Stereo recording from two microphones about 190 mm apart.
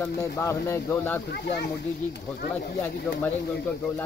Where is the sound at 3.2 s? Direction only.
10° left (ahead or behind).